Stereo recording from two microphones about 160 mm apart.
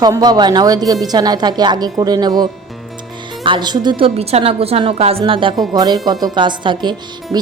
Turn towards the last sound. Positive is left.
turn(degrees=-25)  # may be behind; listen again after turning